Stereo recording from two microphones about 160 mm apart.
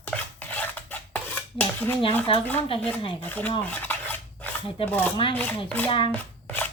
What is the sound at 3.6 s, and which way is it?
Dishes, 10° left (ahead or behind).